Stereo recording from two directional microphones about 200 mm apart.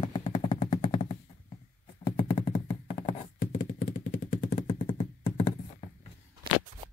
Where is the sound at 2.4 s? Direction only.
30° left (ahead or behind).